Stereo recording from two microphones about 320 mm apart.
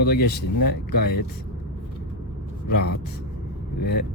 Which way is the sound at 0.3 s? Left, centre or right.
Left.